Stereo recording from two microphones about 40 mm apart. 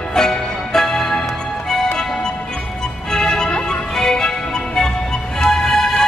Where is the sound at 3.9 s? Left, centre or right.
Centre.